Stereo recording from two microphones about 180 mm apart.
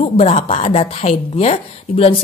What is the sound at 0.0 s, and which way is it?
A woman's voice, 30° left (ahead or behind).